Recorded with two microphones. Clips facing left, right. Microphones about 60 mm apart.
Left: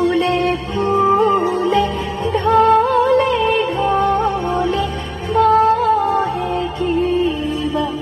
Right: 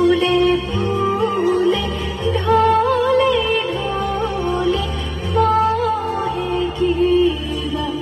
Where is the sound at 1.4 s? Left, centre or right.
Left.